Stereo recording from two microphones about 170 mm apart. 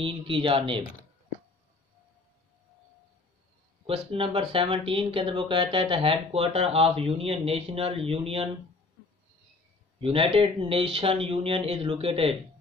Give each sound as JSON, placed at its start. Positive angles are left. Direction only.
{"t": 0.0, "sound": "speech", "side_deg": -30}
{"t": 3.8, "sound": "speech", "side_deg": -30}
{"t": 9.9, "sound": "speech", "side_deg": -35}